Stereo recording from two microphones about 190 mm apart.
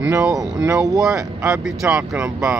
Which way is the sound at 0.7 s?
20° right (ahead or behind).